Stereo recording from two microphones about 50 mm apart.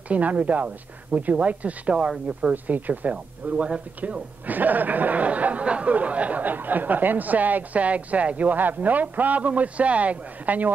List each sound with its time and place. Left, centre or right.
0.1 s speech: right
2.5 s speech: right
4.5 s speech: right